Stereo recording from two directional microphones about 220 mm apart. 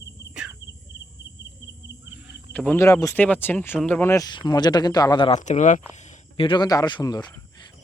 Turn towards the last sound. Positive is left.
turn(degrees=20)  # may be behind; listen again after turning